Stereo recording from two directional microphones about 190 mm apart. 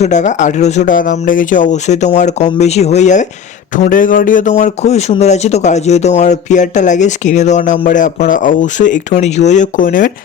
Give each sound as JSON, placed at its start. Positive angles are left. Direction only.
{"t": 0.0, "sound": "speech", "side_deg": 40}